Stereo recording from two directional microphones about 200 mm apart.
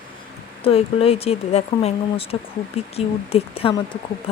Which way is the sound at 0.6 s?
30° left (ahead or behind).